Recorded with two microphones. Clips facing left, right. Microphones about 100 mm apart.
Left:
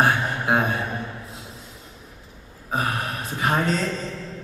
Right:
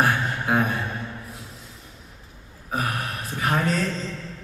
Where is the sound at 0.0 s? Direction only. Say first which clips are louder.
Left 2 dB; 20° left (ahead or behind).